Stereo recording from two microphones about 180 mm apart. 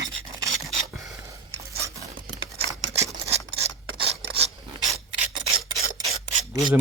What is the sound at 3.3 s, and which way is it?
Scissors, 35° right (ahead or behind).